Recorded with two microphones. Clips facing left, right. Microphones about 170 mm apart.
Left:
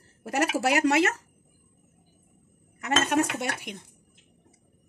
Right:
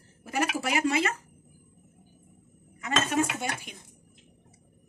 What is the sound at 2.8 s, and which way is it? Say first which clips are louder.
Speech: left 2 dB; 75° left (ahead or behind).